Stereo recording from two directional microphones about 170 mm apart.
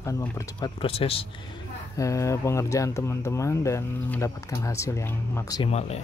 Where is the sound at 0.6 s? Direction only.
35° left (ahead or behind).